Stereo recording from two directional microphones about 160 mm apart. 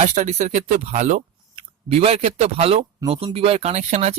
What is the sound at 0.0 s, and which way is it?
Speech, 50° right (ahead or behind).